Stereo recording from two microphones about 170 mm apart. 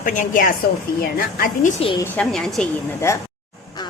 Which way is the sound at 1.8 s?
35° left (ahead or behind).